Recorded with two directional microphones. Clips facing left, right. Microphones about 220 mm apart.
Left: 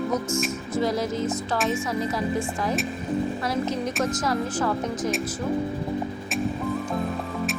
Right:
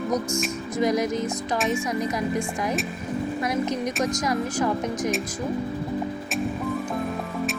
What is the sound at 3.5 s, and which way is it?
A woman's voice, 15° right (ahead or behind).